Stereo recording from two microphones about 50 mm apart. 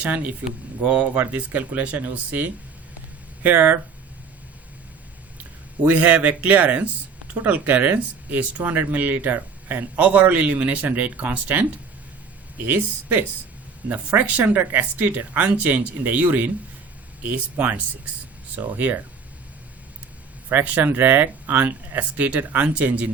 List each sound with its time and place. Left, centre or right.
0.0 s speech: right
5.9 s speech: right
12.6 s speech: right
20.5 s speech: right